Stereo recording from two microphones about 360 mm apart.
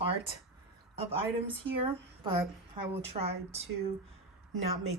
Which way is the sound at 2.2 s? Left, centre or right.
Centre.